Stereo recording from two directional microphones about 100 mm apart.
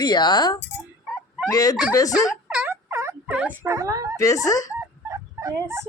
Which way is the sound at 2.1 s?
5° right (ahead or behind).